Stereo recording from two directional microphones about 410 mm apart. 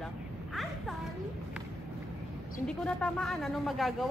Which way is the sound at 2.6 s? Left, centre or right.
Centre.